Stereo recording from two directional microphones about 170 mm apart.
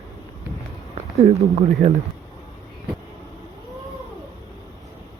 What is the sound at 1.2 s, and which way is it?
Speech, 40° right (ahead or behind).